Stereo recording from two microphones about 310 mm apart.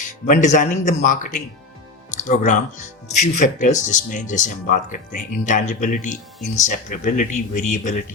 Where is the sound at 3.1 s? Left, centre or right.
Left.